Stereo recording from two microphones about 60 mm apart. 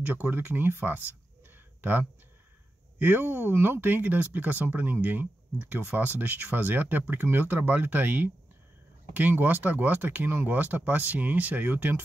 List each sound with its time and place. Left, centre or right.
0.0 s speech: right
1.5 s a sound: right
3.0 s speech: right